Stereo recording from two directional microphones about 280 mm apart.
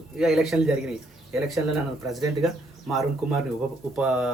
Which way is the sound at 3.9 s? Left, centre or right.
Centre.